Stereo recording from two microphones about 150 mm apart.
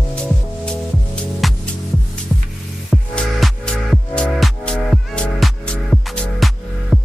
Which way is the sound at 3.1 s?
5° left (ahead or behind).